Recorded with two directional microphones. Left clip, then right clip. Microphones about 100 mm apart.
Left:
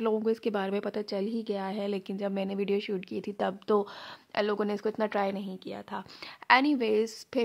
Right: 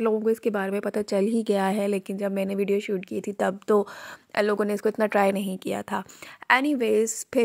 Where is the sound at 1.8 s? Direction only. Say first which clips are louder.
Right 6 dB; 35° right (ahead or behind).